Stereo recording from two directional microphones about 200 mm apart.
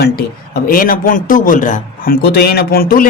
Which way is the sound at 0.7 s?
45° left (ahead or behind).